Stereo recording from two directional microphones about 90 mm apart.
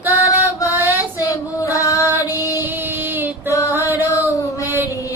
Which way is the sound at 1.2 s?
40° left (ahead or behind).